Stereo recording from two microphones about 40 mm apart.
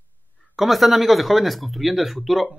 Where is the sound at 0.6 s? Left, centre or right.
Centre.